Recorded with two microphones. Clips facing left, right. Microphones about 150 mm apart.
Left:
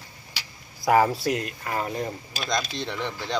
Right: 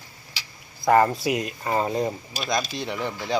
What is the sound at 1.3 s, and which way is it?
Speech, 15° right (ahead or behind).